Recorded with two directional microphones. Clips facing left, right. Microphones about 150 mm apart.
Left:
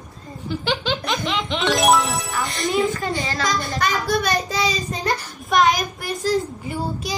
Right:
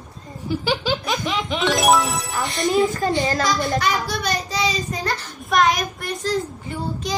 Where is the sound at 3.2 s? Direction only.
45° right (ahead or behind).